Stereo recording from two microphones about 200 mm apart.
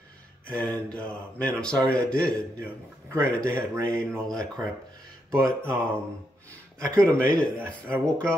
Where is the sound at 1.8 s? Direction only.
5° left (ahead or behind).